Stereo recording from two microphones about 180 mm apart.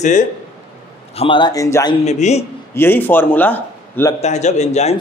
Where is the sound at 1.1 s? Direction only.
25° left (ahead or behind).